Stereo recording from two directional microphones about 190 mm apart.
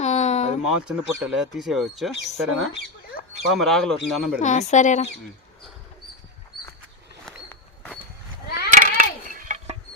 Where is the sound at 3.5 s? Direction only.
Centre (ahead or behind).